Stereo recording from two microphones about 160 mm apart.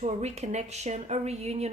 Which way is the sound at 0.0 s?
45° right (ahead or behind).